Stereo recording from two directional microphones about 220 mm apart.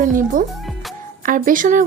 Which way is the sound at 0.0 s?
35° right (ahead or behind).